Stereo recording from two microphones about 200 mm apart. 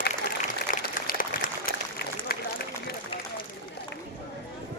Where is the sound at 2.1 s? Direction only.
50° left (ahead or behind).